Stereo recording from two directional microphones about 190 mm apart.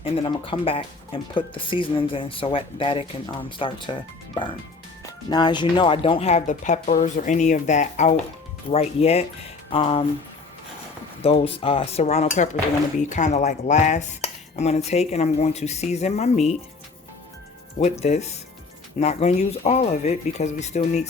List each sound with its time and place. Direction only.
0.0 s speech: 30° left (ahead or behind)
5.3 s cutlery: 25° left (ahead or behind)
11.2 s cutlery: 30° left (ahead or behind)
18.0 s cutlery: 35° left (ahead or behind)